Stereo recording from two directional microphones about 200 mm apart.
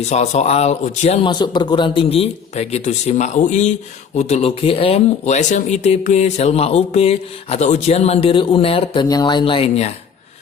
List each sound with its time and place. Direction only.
0.0 s speech: 35° left (ahead or behind)